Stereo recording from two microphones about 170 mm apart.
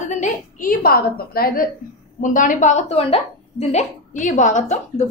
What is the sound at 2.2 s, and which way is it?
A woman's voice, 50° left (ahead or behind).